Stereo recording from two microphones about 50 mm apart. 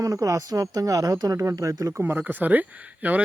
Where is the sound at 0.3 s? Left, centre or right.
Right.